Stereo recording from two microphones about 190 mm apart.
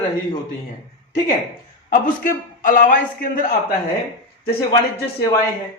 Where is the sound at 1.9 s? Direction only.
45° left (ahead or behind).